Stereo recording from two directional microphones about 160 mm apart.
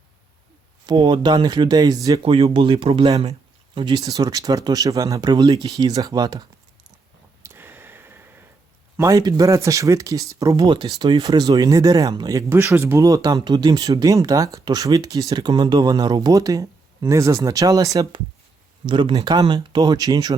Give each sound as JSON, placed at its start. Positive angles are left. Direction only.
{"t": 0.9, "sound": "speech", "side_deg": -30}
{"t": 2.2, "sound": "speech", "side_deg": -35}
{"t": 7.4, "sound": "a sound", "side_deg": -15}
{"t": 9.0, "sound": "speech", "side_deg": -20}